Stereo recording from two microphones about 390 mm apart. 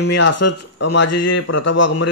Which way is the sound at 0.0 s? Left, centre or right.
Left.